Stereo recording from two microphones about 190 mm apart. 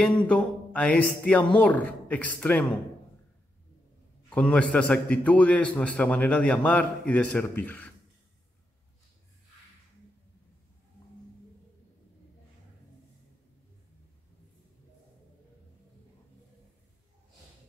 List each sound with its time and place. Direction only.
0.0 s a man's voice: 5° left (ahead or behind)
4.3 s a man's voice: 5° left (ahead or behind)